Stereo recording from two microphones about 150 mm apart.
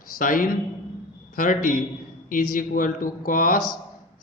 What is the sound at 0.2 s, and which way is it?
A man's voice, 65° left (ahead or behind).